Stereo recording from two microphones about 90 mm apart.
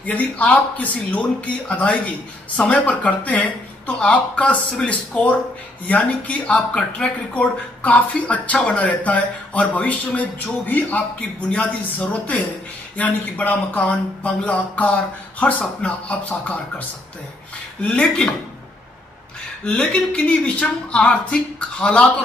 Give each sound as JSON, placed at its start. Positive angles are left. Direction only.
{"t": 0.0, "sound": "speech", "side_deg": 15}
{"t": 17.8, "sound": "speech", "side_deg": 10}
{"t": 19.6, "sound": "speech", "side_deg": 15}